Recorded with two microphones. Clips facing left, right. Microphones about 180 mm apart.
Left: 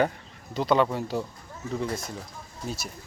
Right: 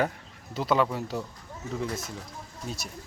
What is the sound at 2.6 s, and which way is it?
Speech, centre (ahead or behind).